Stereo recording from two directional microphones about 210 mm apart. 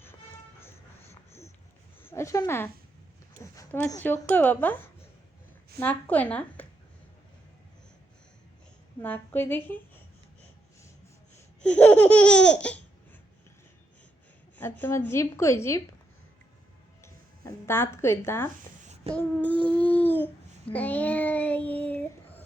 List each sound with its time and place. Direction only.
0.6 s a sound: 10° left (ahead or behind)
2.0 s speech: 10° left (ahead or behind)
3.5 s a sound: 10° left (ahead or behind)
4.0 s speech: 10° left (ahead or behind)
9.0 s speech: 10° left (ahead or behind)
11.6 s laughter: 5° left (ahead or behind)
14.6 s speech: 10° left (ahead or behind)
17.0 s speech: 10° left (ahead or behind)